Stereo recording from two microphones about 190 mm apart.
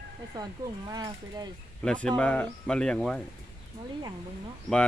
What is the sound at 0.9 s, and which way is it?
Speech, 20° right (ahead or behind).